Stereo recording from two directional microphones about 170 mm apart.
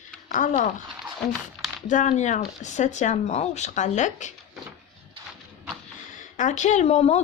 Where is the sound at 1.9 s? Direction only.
45° left (ahead or behind).